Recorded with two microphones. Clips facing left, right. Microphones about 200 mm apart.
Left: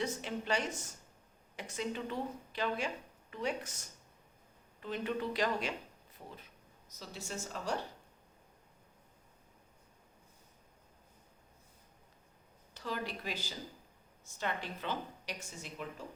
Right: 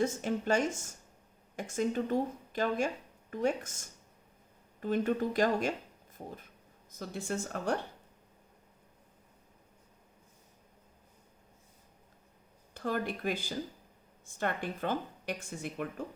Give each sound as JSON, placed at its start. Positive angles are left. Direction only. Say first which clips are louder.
{"t": 0.0, "sound": "speech", "louder": "right 6 dB", "side_deg": -45}
{"t": 12.7, "sound": "speech", "louder": "right 6 dB", "side_deg": -50}